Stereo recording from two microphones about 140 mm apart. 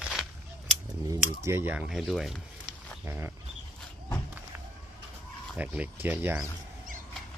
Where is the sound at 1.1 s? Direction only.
20° right (ahead or behind); by 2.4 s centre (ahead or behind).